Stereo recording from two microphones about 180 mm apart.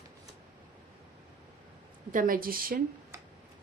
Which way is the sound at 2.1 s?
50° right (ahead or behind).